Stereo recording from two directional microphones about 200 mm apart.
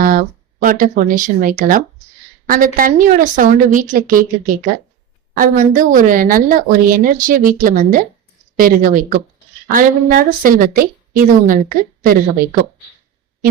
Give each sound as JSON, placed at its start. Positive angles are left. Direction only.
{"t": 0.0, "sound": "speech", "side_deg": -45}